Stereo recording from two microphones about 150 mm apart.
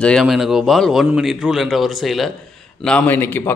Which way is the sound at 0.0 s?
Centre (ahead or behind).